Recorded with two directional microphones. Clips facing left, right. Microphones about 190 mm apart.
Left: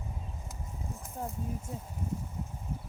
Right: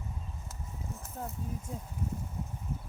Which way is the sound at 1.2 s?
10° left (ahead or behind).